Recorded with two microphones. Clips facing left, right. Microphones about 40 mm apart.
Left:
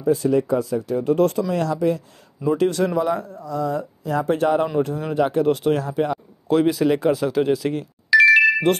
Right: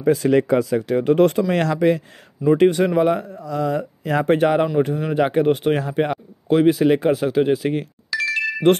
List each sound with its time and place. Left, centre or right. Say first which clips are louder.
0.0 s speech: right 2 dB; right
2.5 s speech: right 4 dB; right
3.0 s speech: right 4 dB; right
4.4 s speech: right 2 dB; right
6.5 s speech: right 3 dB; centre
8.1 s ringtone: left 10 dB; centre